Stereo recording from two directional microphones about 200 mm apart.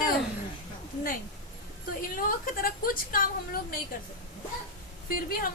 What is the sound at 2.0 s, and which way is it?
A woman's voice, 45° left (ahead or behind).